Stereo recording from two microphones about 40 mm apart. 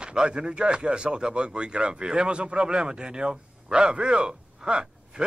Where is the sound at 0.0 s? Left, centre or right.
Right.